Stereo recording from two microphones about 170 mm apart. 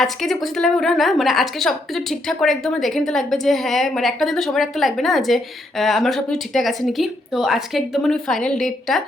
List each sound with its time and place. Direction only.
0.0 s a woman's voice: centre (ahead or behind)